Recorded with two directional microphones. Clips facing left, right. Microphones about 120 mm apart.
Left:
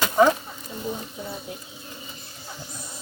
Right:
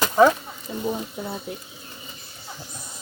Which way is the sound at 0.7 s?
60° right (ahead or behind).